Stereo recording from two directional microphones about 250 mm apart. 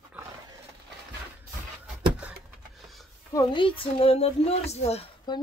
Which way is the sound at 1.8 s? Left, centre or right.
Centre.